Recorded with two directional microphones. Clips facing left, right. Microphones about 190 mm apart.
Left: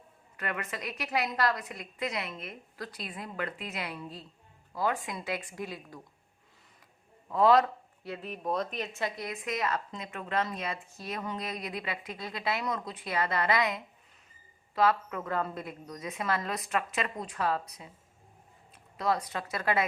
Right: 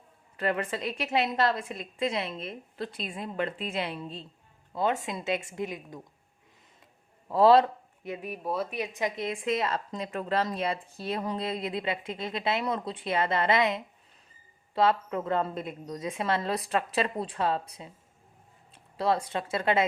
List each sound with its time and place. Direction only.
0.3 s a woman's voice: 30° right (ahead or behind)
7.3 s speech: 30° right (ahead or behind)
8.0 s a woman's voice: 15° right (ahead or behind)